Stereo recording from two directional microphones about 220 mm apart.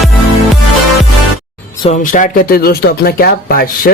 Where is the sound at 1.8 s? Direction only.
35° left (ahead or behind).